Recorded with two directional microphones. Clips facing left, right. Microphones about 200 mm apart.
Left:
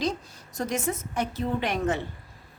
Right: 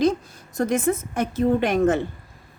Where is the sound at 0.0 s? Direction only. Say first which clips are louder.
Right 9 dB; 55° right (ahead or behind).